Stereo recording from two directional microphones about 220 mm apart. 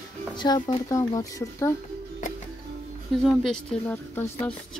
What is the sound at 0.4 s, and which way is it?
Speech, 20° left (ahead or behind).